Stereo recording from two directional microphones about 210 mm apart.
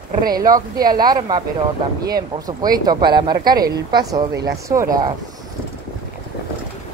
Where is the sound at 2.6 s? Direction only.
20° right (ahead or behind).